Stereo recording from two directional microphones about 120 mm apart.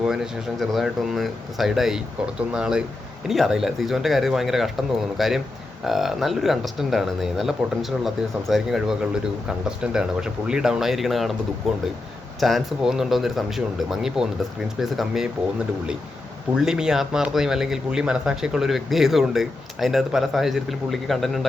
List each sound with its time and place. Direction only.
0.0 s speech: 5° right (ahead or behind)